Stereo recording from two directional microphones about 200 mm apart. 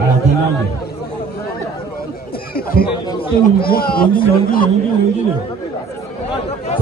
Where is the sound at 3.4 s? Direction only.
50° left (ahead or behind).